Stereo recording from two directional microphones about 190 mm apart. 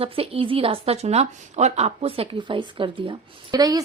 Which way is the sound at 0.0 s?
30° right (ahead or behind).